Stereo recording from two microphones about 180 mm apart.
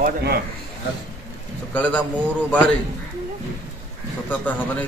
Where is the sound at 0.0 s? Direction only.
60° right (ahead or behind).